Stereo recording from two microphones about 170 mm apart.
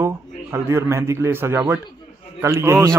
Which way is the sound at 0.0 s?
15° right (ahead or behind).